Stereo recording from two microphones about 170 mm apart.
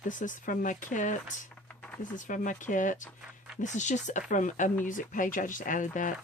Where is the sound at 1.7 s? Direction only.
5° left (ahead or behind).